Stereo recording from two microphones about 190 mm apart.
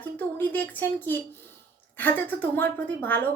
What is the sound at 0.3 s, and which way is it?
Speech, 10° left (ahead or behind).